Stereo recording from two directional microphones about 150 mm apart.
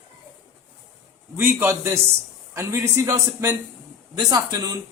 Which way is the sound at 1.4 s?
15° right (ahead or behind).